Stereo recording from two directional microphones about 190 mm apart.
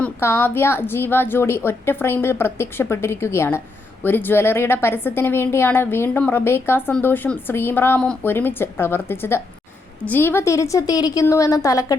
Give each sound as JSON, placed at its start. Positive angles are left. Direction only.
{"t": 0.0, "sound": "a woman's voice", "side_deg": 10}